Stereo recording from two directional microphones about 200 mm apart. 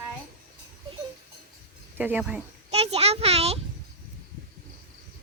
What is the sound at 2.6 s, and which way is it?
Speech, 30° right (ahead or behind).